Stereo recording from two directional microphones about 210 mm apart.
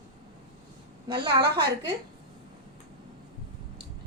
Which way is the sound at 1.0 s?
20° right (ahead or behind).